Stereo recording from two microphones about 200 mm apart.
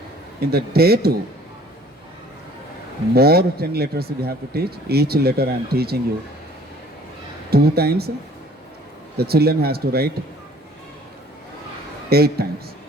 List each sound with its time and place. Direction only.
0.3 s speech: 50° right (ahead or behind)
3.2 s speech: 50° right (ahead or behind)
7.5 s speech: 50° right (ahead or behind)
9.1 s speech: 50° right (ahead or behind)
12.0 s speech: 50° right (ahead or behind)